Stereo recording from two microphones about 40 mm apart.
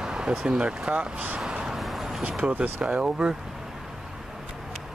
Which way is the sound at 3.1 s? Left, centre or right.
Centre.